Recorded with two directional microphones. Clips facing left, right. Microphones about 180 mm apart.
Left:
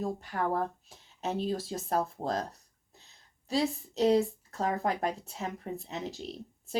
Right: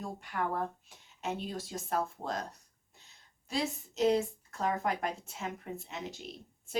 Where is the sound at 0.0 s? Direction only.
35° left (ahead or behind).